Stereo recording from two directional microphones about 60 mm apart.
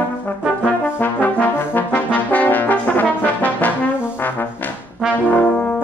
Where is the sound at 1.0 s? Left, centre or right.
Left.